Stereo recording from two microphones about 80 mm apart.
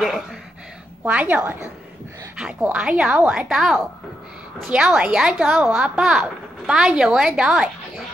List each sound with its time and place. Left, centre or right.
1.0 s a woman's voice: right
2.3 s a woman's voice: centre